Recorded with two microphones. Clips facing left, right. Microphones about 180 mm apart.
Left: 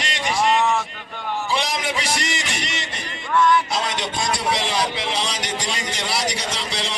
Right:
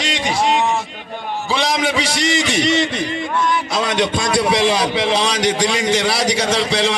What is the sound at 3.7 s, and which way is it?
A man's voice, 75° right (ahead or behind).